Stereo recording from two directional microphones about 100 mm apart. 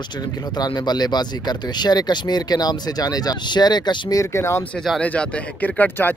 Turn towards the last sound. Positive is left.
turn(degrees=20)  # may be behind; listen again after turning